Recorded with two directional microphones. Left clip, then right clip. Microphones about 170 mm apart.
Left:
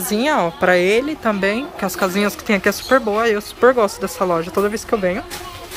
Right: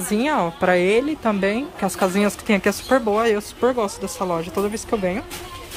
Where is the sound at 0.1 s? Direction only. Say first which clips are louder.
Left 3 dB; 10° right (ahead or behind).